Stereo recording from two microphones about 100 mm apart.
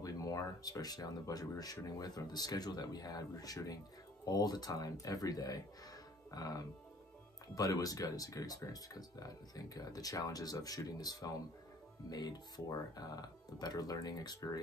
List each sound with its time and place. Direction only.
0.0 s speech: 35° left (ahead or behind)